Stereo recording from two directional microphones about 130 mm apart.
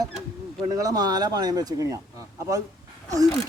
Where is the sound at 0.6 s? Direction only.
25° right (ahead or behind).